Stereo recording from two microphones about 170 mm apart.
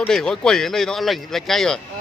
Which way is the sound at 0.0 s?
5° left (ahead or behind).